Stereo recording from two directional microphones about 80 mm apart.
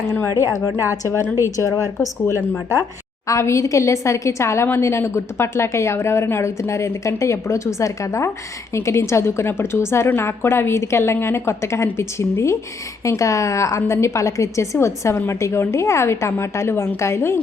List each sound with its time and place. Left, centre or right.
0.2 s a woman's voice: left
3.2 s a woman's voice: left